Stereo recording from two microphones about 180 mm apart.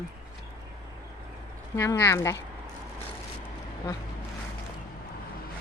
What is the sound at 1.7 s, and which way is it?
Speech, 15° left (ahead or behind).